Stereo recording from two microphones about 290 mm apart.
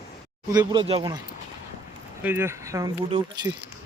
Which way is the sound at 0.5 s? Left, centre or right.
Centre.